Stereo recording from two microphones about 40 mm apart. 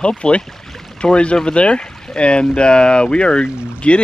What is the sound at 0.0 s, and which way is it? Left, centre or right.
Speech, left.